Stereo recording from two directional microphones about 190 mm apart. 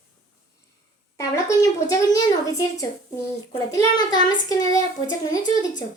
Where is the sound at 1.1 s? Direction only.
15° left (ahead or behind).